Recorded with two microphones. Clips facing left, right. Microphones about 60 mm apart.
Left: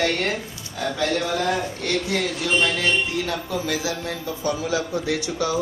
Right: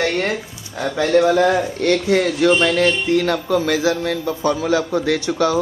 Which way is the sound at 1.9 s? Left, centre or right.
Right.